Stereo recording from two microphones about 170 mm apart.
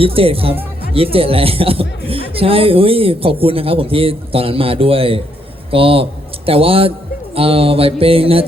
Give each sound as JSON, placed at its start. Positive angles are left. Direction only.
{"t": 0.0, "sound": "speech", "side_deg": -35}